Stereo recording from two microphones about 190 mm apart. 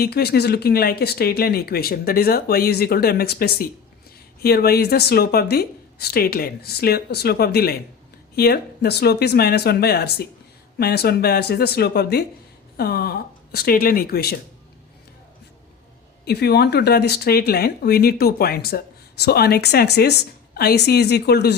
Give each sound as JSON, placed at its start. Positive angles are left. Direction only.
{"t": 0.0, "sound": "speech", "side_deg": 55}
{"t": 16.2, "sound": "speech", "side_deg": 60}